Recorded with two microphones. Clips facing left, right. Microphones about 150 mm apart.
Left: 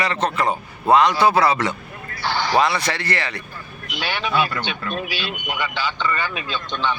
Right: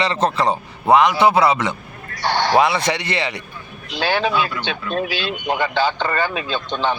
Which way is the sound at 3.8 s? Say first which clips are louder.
Right 7 dB; 35° right (ahead or behind).